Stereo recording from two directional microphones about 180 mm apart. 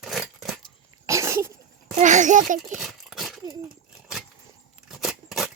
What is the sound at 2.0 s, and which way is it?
Speech, 40° right (ahead or behind).